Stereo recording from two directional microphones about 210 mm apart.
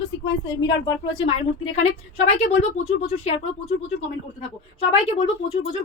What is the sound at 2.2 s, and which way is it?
Speech, 30° left (ahead or behind).